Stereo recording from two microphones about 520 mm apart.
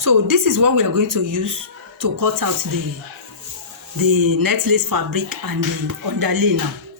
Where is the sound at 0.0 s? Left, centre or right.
Right.